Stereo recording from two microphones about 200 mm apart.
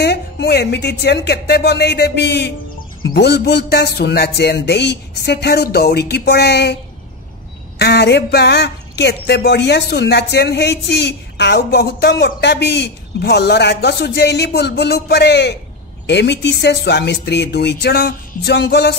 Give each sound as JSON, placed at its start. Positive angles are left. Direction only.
{"t": 0.0, "sound": "speech", "side_deg": 55}
{"t": 7.8, "sound": "speech", "side_deg": 55}